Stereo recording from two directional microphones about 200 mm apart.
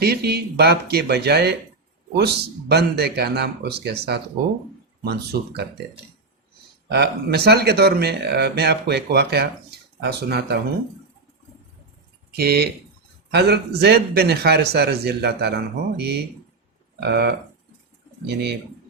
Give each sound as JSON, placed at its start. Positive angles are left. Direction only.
{"t": 0.0, "sound": "speech", "side_deg": -55}
{"t": 5.0, "sound": "speech", "side_deg": -55}
{"t": 6.8, "sound": "speech", "side_deg": -55}
{"t": 12.4, "sound": "speech", "side_deg": -50}